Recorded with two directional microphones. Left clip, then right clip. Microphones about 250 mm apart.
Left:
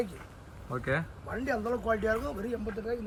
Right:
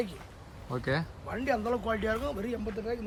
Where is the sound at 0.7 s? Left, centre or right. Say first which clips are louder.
Even; centre.